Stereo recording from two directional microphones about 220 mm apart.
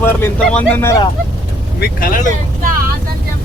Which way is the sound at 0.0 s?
10° left (ahead or behind).